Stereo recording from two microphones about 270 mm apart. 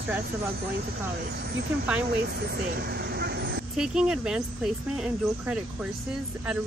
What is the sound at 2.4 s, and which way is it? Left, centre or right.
Vehicle, right.